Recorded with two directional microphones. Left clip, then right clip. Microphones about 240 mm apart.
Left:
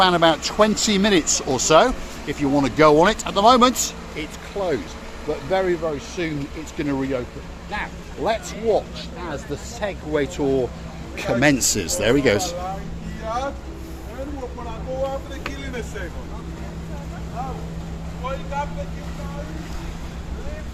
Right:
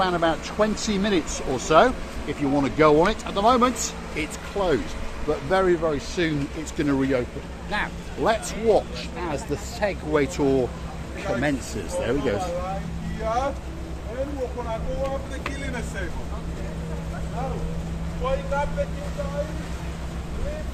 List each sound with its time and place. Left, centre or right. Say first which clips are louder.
0.0 s speech: left 6 dB; left
4.1 s speech: right 1 dB; centre
9.8 s speech: even; centre
11.2 s speech: left 7 dB; left